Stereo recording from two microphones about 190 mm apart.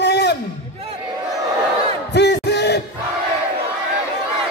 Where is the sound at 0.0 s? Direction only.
60° left (ahead or behind).